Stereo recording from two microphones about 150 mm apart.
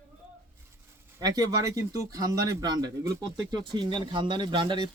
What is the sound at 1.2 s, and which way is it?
A man's voice, 25° right (ahead or behind).